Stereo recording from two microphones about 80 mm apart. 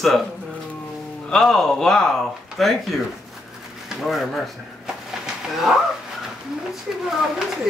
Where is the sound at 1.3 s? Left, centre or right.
Centre.